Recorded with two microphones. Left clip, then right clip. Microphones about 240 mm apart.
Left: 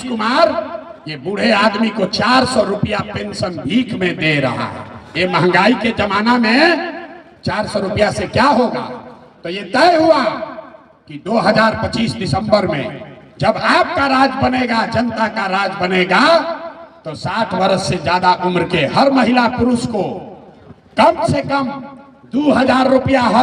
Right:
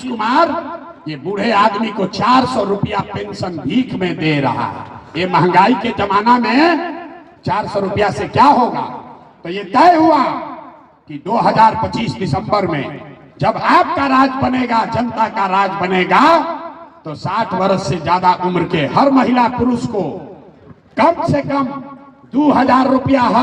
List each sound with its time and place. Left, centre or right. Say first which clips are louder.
0.0 s a man's voice: even; left
20.9 s a man's voice: left 1 dB; left